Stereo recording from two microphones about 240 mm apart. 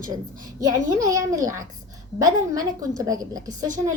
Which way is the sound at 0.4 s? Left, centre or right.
Centre.